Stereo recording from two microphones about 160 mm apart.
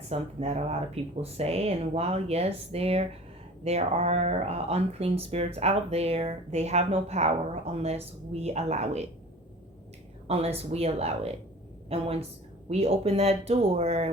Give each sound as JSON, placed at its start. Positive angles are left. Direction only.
{"t": 0.1, "sound": "speech", "side_deg": -40}
{"t": 10.2, "sound": "speech", "side_deg": -40}